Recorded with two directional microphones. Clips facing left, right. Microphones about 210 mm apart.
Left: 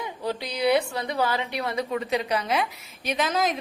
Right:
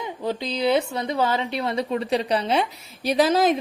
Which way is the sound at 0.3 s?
20° right (ahead or behind).